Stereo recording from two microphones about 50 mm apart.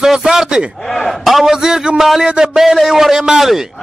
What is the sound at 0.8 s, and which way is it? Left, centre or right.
A man's voice, centre.